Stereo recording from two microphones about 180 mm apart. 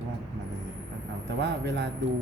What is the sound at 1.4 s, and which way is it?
Speech, 75° right (ahead or behind).